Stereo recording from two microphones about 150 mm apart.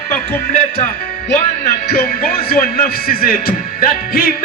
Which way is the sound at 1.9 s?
80° left.